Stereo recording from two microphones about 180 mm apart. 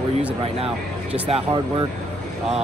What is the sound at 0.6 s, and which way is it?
Speech, 35° right (ahead or behind).